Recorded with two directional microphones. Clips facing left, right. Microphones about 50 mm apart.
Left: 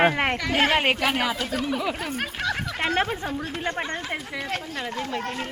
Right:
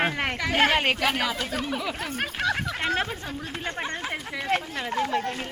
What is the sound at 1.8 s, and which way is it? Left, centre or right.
Speech, centre.